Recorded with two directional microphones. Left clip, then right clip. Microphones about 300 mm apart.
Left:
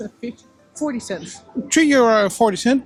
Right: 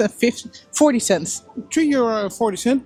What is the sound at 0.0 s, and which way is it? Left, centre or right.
Speech, right.